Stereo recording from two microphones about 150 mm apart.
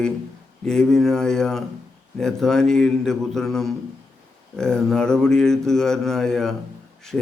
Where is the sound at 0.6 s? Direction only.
5° left (ahead or behind).